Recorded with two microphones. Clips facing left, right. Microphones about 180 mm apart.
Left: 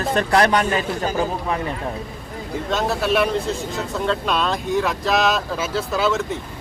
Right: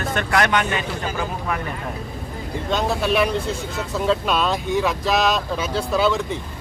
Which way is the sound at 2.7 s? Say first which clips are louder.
Even; centre (ahead or behind).